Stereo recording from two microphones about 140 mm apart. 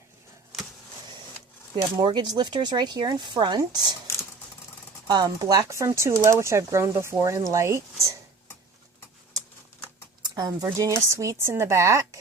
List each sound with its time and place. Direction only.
1.7 s speech: 30° right (ahead or behind)
5.0 s speech: 30° right (ahead or behind)
10.2 s speech: 25° right (ahead or behind)